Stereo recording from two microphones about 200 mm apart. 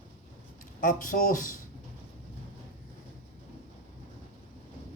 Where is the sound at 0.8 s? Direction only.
45° left (ahead or behind).